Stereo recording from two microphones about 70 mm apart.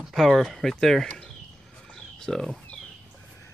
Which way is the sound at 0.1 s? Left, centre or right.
Centre.